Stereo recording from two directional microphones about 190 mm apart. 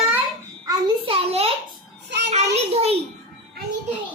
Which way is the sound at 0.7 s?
25° right (ahead or behind).